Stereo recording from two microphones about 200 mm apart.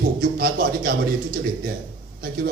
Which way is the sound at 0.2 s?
50° right (ahead or behind).